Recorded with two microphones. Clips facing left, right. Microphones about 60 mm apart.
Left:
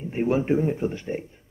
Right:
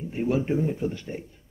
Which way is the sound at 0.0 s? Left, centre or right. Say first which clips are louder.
Left 2 dB; left.